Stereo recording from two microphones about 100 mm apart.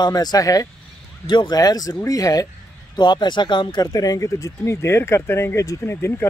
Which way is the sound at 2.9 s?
45° left (ahead or behind).